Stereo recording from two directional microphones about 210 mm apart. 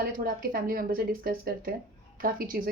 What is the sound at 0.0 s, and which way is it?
A woman's voice, 45° right (ahead or behind).